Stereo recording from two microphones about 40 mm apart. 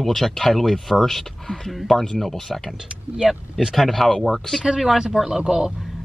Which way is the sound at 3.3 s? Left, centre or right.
Centre.